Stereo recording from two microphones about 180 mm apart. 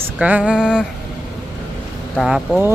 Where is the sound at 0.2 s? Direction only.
5° right (ahead or behind).